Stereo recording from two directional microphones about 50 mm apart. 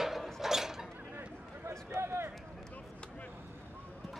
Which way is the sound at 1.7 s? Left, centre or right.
Right.